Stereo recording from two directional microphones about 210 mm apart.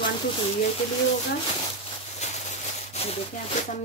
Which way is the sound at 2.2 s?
35° left (ahead or behind).